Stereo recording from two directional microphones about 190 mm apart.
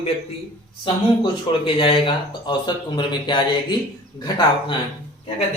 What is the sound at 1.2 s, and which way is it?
Speech, 30° left (ahead or behind).